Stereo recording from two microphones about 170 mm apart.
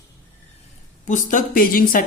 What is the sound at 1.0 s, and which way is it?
Speech, 50° left (ahead or behind).